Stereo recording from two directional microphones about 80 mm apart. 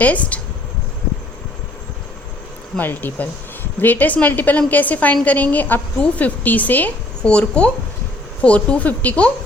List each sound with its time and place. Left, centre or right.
0.0 s a woman's voice: centre
2.7 s a woman's voice: left